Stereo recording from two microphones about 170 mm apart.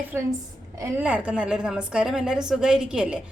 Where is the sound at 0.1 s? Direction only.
15° right (ahead or behind).